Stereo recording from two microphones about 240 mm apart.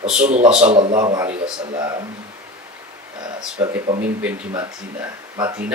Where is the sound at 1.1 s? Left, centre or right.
Centre.